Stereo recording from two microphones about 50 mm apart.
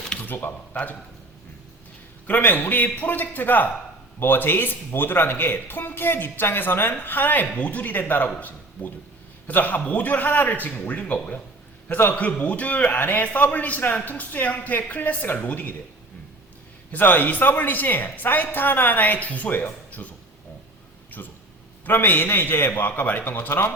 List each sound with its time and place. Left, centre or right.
0.3 s speech: left
2.2 s a man's voice: left
16.9 s speech: left
21.1 s speech: left